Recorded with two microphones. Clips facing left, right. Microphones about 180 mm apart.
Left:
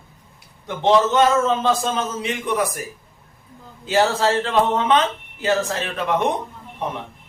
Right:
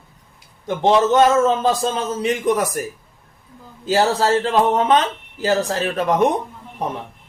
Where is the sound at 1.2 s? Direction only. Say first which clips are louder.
Right 3 dB; 40° right (ahead or behind).